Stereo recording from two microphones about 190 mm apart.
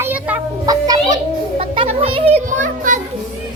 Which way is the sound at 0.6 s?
20° right (ahead or behind).